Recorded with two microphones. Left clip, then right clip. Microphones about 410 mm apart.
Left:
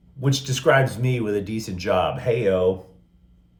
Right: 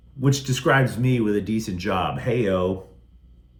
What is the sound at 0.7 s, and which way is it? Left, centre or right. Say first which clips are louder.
Speech: left 1 dB; centre.